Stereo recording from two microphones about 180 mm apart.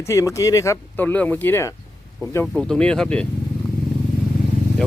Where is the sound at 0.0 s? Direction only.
15° left (ahead or behind).